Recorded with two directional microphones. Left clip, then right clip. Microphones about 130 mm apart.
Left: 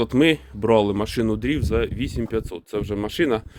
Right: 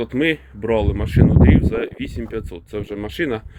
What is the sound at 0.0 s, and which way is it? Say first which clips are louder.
Speech: left 1 dB; 45° left (ahead or behind).